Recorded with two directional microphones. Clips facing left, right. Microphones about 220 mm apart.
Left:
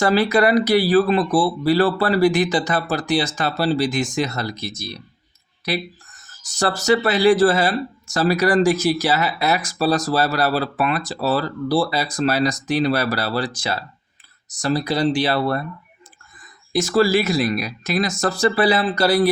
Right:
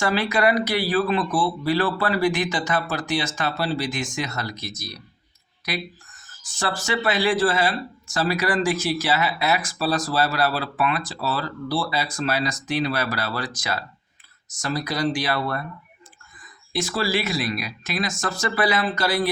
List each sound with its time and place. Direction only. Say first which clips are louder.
0.0 s speech: left 5 dB; 40° left (ahead or behind)
6.4 s speech: left 6 dB; 40° left (ahead or behind)
16.7 s speech: left 8 dB; 45° left (ahead or behind)